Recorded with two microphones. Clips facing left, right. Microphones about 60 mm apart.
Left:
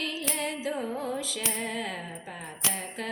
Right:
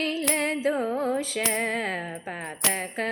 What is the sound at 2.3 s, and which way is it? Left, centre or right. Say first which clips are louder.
Speech: right 5 dB; right.